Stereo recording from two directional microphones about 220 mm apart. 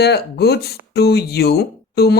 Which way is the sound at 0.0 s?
45° left (ahead or behind).